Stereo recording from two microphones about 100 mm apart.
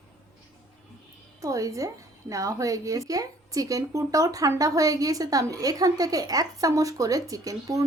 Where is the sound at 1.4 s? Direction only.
35° right (ahead or behind).